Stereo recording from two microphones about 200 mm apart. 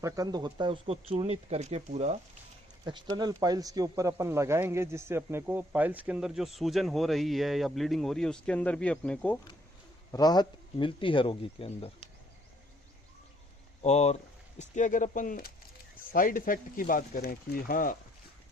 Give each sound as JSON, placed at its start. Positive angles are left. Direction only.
{"t": 0.0, "sound": "speech", "side_deg": -20}
{"t": 2.8, "sound": "a man's voice", "side_deg": -20}
{"t": 10.1, "sound": "speech", "side_deg": 20}
{"t": 13.8, "sound": "speech", "side_deg": 35}